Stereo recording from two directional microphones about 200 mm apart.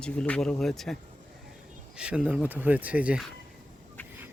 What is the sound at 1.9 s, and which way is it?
Speech, 5° right (ahead or behind).